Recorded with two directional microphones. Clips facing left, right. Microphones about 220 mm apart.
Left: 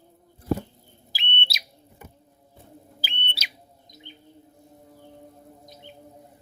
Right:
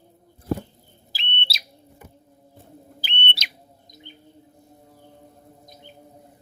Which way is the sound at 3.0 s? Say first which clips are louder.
Right 6 dB; 5° left (ahead or behind).